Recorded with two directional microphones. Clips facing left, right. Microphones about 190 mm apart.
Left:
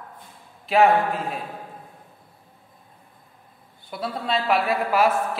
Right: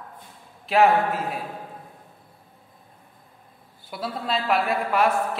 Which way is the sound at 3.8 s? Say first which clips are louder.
Left 1 dB; centre (ahead or behind).